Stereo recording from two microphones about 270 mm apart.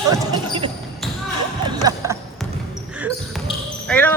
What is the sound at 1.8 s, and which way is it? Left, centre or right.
Basketball bounce, centre.